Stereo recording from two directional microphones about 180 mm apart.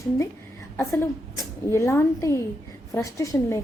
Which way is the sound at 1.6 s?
15° left (ahead or behind).